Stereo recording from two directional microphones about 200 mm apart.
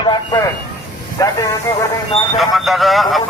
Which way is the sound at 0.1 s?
20° left (ahead or behind).